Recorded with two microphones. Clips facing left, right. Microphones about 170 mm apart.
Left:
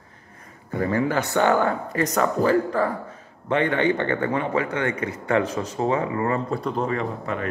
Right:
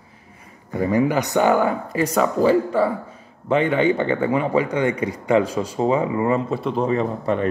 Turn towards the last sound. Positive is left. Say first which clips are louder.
# right 6 dB
turn(degrees=-25)  # may be behind; listen again after turning